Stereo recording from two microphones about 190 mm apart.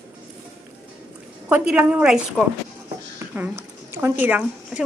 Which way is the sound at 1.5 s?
5° right (ahead or behind).